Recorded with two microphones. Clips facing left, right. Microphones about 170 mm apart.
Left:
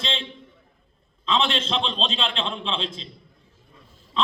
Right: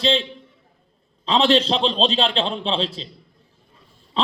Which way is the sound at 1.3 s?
35° right (ahead or behind).